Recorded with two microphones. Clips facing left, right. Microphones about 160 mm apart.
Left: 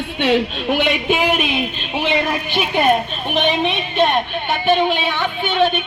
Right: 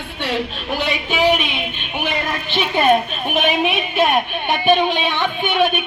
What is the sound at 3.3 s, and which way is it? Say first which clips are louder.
A woman's voice: even; 5° right (ahead or behind).